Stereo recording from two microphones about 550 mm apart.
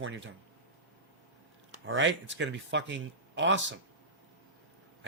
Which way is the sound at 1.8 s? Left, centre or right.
Centre.